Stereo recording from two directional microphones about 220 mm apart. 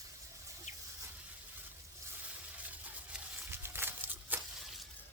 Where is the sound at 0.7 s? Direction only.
35° left (ahead or behind).